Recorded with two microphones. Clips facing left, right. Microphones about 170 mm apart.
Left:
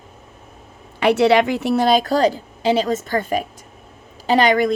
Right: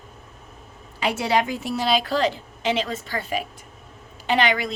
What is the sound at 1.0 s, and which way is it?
A woman's voice, 65° left (ahead or behind).